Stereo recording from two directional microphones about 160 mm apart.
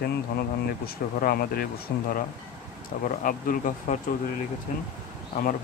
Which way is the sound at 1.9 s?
85° left.